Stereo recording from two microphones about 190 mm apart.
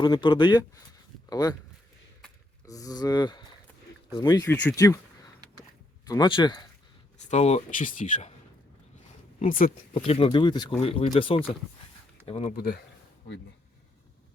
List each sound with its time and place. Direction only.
0.0 s speech: 25° left (ahead or behind)
2.6 s speech: 20° left (ahead or behind)
6.1 s speech: 20° left (ahead or behind)
7.3 s speech: 35° left (ahead or behind)
9.4 s speech: 45° left (ahead or behind)
10.1 s speech: 30° left (ahead or behind)
12.5 s speech: 55° left (ahead or behind)